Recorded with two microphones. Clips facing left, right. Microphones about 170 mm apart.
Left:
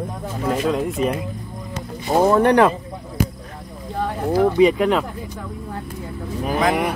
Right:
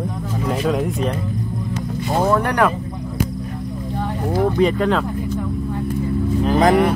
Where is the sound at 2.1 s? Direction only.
20° left (ahead or behind).